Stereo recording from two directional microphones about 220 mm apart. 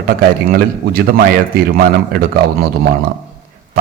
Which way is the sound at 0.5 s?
45° right (ahead or behind).